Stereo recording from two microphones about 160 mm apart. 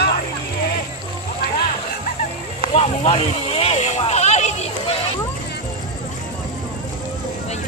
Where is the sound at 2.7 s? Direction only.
40° left (ahead or behind).